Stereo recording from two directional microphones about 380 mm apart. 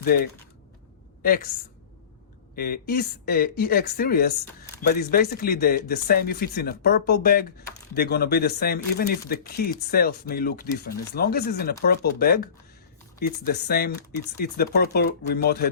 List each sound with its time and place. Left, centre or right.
0.1 s a woman's voice: left
2.6 s speech: left